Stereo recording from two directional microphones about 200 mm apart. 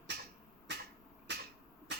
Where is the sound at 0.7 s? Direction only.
60° right (ahead or behind).